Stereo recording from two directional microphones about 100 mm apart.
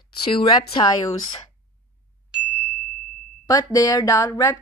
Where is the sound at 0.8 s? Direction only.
40° left (ahead or behind).